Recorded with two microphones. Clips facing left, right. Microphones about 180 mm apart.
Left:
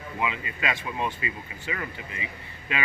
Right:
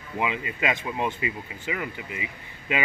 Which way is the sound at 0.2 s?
20° right (ahead or behind).